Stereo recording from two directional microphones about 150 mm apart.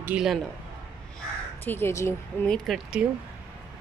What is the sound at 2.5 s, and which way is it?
Speech, centre (ahead or behind).